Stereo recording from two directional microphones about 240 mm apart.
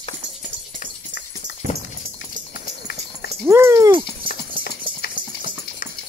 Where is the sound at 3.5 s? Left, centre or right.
Centre.